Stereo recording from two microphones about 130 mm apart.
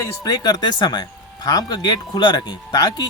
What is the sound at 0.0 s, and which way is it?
Speech, 30° left (ahead or behind).